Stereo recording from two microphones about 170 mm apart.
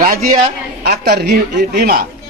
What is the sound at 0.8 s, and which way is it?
A woman's voice, 70° right (ahead or behind).